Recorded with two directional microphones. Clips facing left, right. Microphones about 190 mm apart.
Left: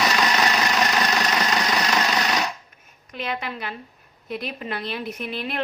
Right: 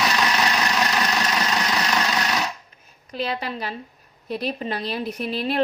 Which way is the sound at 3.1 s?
35° right (ahead or behind).